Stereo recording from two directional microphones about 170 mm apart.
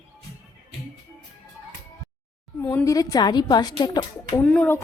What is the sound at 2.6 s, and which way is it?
A woman's voice, 15° left (ahead or behind).